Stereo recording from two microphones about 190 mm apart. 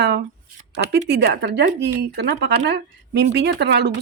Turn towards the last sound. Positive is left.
turn(degrees=-60)  # may be behind; listen again after turning